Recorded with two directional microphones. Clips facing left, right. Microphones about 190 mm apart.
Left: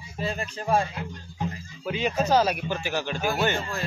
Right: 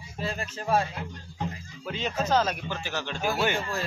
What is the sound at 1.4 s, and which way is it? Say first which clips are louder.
Speech: left 2 dB; 10° left (ahead or behind).